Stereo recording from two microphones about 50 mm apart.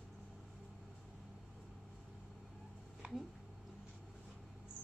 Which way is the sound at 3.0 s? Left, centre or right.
Right.